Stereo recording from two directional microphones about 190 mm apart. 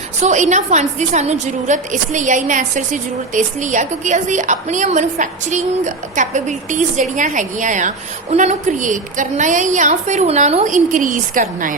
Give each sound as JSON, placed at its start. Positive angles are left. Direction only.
{"t": 0.2, "sound": "a woman's voice", "side_deg": -40}